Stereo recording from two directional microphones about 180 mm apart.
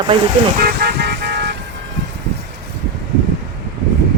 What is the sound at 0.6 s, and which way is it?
Vehicle, 60° right (ahead or behind).